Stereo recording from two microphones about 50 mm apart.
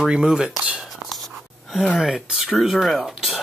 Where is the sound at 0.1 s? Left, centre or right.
Centre.